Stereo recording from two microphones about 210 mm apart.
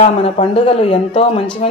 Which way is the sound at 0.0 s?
30° left (ahead or behind).